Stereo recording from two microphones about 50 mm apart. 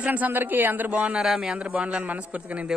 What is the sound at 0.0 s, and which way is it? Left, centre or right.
Speech, right.